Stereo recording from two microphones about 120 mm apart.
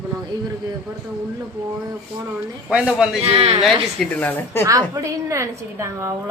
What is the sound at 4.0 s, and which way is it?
Speech, 15° left (ahead or behind).